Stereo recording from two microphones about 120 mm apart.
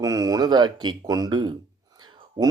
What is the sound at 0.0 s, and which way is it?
Speech, 30° right (ahead or behind).